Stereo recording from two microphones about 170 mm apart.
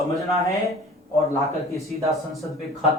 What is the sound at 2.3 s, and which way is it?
Speech, centre (ahead or behind).